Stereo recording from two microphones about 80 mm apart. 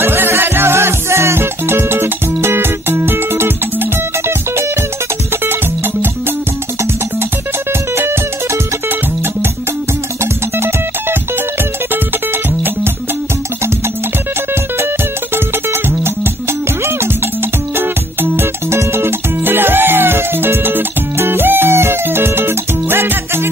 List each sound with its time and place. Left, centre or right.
0.0 s music: right
7.9 s music: right
15.3 s music: right
17.7 s music: right